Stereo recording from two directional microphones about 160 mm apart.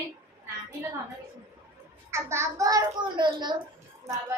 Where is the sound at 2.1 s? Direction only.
15° right (ahead or behind).